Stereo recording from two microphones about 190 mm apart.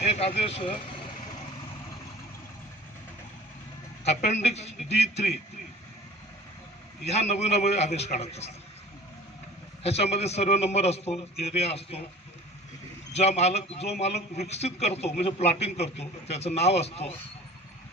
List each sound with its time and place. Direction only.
0.0 s speech: 35° left (ahead or behind)
4.0 s a man's voice: 35° left (ahead or behind)
7.0 s a man's voice: 35° left (ahead or behind)
9.8 s a man's voice: 35° left (ahead or behind)
13.1 s a man's voice: 35° left (ahead or behind)